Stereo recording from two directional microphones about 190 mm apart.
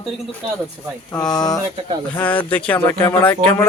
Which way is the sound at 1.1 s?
20° left (ahead or behind).